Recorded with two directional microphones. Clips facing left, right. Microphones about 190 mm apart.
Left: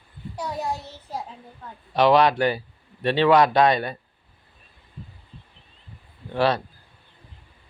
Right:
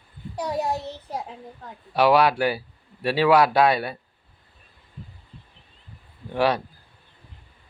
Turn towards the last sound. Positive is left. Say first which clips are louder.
# even
turn(degrees=-10)  # may be behind; listen again after turning